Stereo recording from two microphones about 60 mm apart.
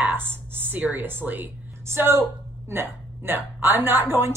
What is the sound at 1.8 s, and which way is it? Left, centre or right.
A woman's voice, right.